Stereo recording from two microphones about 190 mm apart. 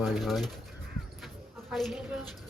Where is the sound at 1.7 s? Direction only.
Centre (ahead or behind).